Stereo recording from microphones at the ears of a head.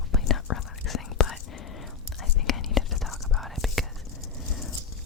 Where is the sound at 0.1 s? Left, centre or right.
Left.